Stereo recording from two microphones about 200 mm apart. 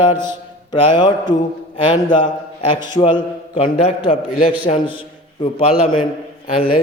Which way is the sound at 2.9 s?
25° left (ahead or behind).